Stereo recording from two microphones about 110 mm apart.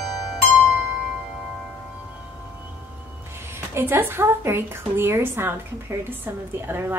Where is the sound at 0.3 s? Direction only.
Centre (ahead or behind).